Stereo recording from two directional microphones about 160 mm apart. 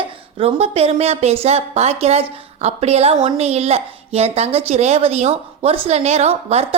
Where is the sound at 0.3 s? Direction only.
40° right (ahead or behind).